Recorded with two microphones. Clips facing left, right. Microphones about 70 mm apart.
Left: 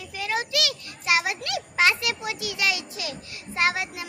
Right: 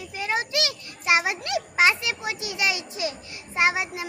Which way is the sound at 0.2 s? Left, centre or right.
Right.